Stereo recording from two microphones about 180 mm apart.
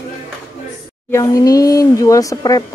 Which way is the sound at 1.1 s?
20° left (ahead or behind).